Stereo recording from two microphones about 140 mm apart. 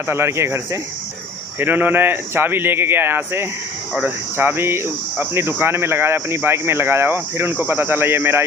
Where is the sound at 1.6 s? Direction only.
15° right (ahead or behind).